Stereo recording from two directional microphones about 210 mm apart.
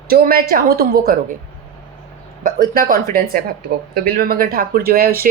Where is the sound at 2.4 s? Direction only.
45° right (ahead or behind).